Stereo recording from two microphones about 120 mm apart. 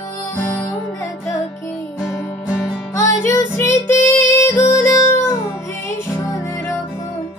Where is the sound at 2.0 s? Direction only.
5° right (ahead or behind).